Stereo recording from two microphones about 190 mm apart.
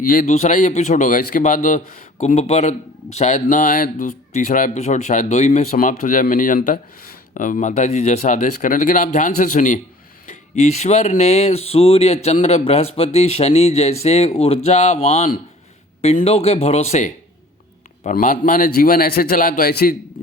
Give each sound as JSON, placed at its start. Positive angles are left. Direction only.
{"t": 0.0, "sound": "a man's voice", "side_deg": 45}